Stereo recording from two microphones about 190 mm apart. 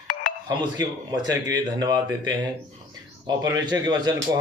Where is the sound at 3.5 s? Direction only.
20° right (ahead or behind).